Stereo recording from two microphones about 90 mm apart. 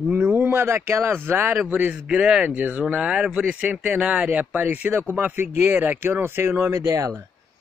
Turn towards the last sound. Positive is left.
turn(degrees=-35)  # may be behind; listen again after turning